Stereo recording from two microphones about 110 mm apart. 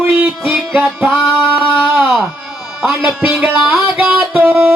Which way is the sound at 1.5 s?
20° right (ahead or behind).